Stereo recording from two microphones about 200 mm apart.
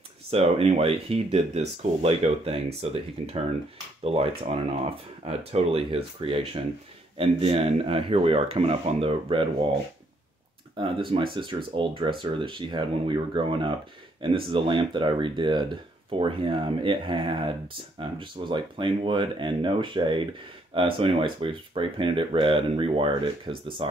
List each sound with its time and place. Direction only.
0.3 s speech: 30° right (ahead or behind)
10.8 s speech: 25° right (ahead or behind)